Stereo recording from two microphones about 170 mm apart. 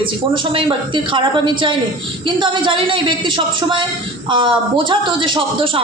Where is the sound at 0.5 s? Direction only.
30° right (ahead or behind).